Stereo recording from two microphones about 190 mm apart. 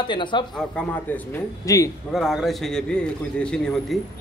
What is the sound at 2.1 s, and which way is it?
Speech, centre (ahead or behind).